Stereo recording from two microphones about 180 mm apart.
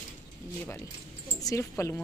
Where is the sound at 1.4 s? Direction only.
20° left (ahead or behind).